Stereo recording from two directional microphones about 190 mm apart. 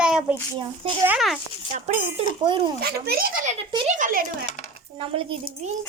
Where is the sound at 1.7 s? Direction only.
40° right (ahead or behind).